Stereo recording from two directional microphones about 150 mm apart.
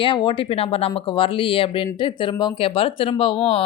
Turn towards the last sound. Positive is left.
turn(degrees=35)  # may be behind; listen again after turning